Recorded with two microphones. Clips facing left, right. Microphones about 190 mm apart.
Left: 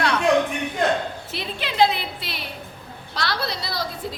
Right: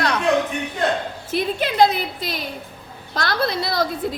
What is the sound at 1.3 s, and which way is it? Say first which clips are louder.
A woman's voice: right 4 dB; 45° right (ahead or behind).